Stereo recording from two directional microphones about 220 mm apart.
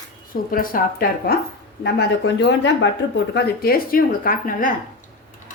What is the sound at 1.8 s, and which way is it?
Speech, 50° left (ahead or behind).